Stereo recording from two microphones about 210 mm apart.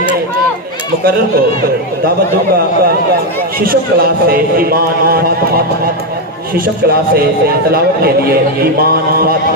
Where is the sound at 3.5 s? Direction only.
45° right (ahead or behind).